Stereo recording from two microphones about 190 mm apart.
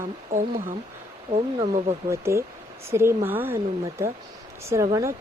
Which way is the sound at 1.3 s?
35° right (ahead or behind).